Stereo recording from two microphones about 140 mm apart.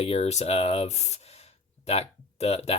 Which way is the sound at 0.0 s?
50° left (ahead or behind).